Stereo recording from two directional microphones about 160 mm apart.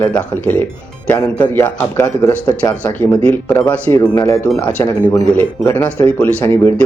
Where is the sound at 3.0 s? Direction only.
10° left (ahead or behind).